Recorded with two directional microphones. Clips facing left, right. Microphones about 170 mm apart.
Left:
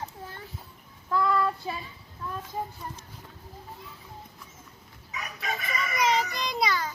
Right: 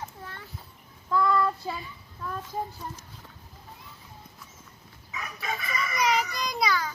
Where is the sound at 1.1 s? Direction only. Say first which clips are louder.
Right 1 dB; 10° left (ahead or behind).